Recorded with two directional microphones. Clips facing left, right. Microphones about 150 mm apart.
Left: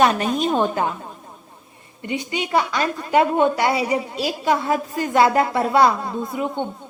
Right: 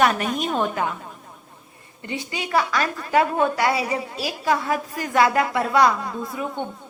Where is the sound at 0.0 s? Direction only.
25° left (ahead or behind).